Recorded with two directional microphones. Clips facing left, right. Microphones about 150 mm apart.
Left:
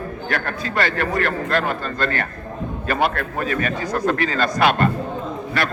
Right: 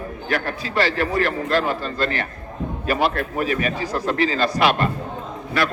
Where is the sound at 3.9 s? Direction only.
45° left (ahead or behind).